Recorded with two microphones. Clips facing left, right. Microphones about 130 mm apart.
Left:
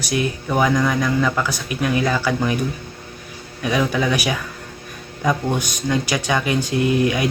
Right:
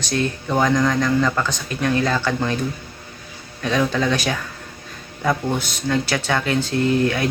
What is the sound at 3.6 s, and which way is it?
Speech, 10° left (ahead or behind).